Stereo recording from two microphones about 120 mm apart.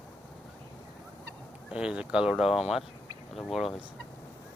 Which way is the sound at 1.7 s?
10° right (ahead or behind).